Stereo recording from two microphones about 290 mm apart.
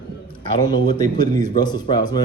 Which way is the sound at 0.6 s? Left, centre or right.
Centre.